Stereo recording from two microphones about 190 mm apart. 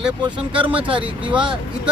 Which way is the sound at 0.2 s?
25° right (ahead or behind).